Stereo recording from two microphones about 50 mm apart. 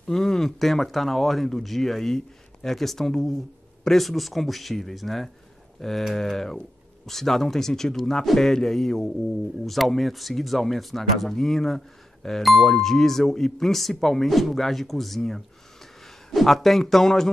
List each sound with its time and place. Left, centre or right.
0.0 s a man's voice: centre